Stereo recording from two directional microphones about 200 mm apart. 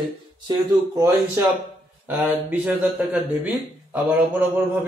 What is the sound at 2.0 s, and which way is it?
A man's voice, 5° right (ahead or behind).